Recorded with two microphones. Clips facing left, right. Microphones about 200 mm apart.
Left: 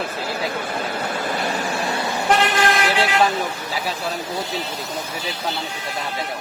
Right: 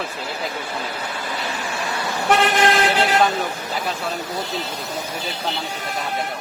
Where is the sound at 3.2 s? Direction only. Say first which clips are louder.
Even; centre (ahead or behind).